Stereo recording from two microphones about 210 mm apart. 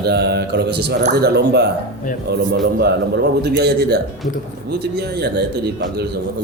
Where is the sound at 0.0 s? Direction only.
50° right (ahead or behind).